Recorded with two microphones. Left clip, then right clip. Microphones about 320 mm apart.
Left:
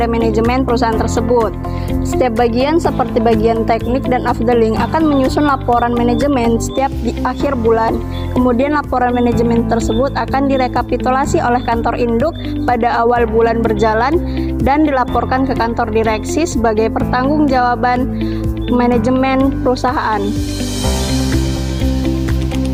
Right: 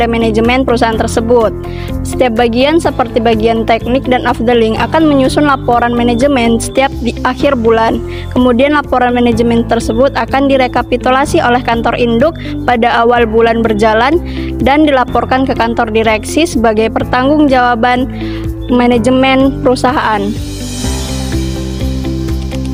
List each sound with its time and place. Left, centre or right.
0.0 s speech: right